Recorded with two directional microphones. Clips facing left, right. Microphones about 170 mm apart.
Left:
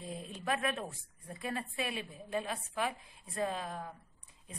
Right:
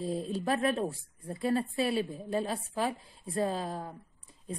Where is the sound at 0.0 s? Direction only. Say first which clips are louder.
Right 9 dB; 35° right (ahead or behind).